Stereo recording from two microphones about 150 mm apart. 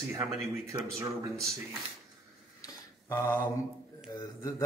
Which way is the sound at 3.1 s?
15° left (ahead or behind).